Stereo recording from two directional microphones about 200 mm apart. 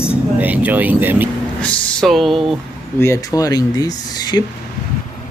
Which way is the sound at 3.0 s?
15° left (ahead or behind).